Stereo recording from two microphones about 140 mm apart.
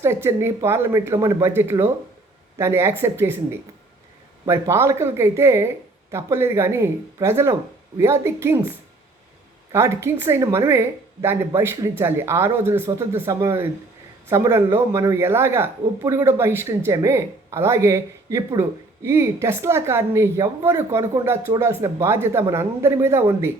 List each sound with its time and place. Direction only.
0.0 s a woman's voice: 20° right (ahead or behind)
4.4 s speech: 20° right (ahead or behind)
9.7 s a woman's voice: 20° right (ahead or behind)